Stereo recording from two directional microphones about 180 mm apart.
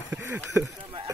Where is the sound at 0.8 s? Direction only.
20° right (ahead or behind).